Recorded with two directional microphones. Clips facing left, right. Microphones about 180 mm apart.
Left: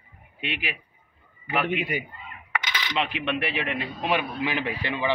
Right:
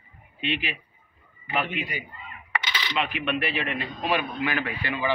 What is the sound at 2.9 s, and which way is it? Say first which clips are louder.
A man's voice: even; 25° left (ahead or behind).